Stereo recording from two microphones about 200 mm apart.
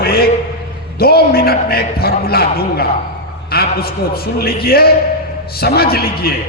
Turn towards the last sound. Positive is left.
turn(degrees=50)  # may be behind; listen again after turning